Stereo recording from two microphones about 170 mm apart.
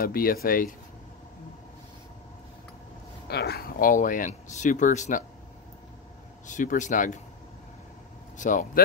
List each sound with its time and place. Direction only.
0.0 s speech: 60° left (ahead or behind)
3.3 s speech: 70° left (ahead or behind); by 5.2 s 45° left (ahead or behind)
6.4 s speech: 50° left (ahead or behind)
8.4 s speech: 50° left (ahead or behind)